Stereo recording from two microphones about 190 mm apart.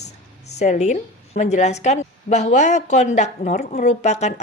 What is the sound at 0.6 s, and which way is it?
A woman's voice, 40° left (ahead or behind).